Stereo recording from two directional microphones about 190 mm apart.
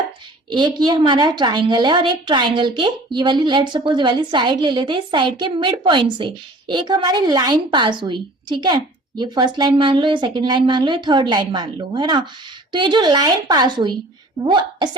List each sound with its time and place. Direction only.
0.5 s a woman's voice: 25° right (ahead or behind)